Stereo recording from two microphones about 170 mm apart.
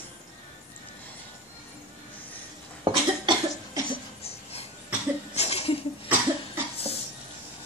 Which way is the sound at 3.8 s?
35° left (ahead or behind).